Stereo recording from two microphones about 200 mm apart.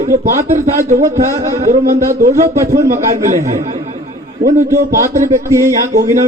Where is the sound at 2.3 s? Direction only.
35° right (ahead or behind).